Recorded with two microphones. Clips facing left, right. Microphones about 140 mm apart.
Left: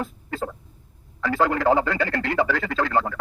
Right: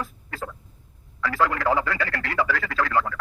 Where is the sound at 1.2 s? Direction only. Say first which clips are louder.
Left 3 dB; 25° left (ahead or behind).